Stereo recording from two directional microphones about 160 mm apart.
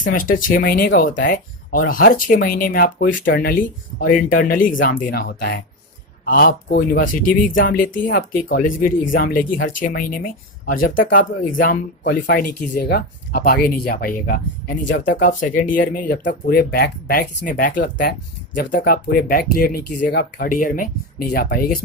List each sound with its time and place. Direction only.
0.0 s speech: 60° left (ahead or behind)